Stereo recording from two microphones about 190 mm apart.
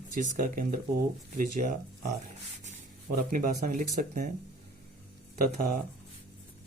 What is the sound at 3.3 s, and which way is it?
Speech, 40° right (ahead or behind).